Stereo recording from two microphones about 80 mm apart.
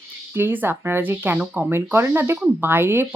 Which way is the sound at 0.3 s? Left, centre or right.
Right.